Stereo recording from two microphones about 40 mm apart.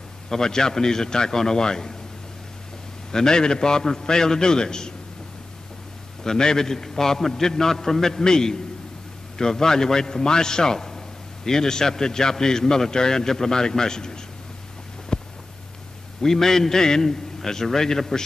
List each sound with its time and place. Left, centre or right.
0.3 s a man's voice: centre
3.1 s a man's voice: centre
6.2 s a man's voice: centre
15.1 s a sound: centre
16.2 s a man's voice: centre